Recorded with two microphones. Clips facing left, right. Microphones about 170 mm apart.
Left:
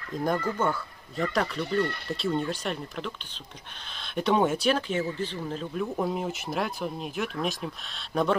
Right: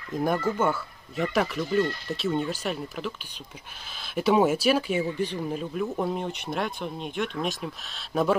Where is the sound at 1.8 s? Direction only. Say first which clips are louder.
Right 3 dB; 60° left (ahead or behind).